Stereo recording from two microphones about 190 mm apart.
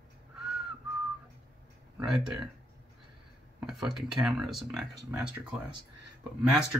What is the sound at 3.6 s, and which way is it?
Speech, centre (ahead or behind).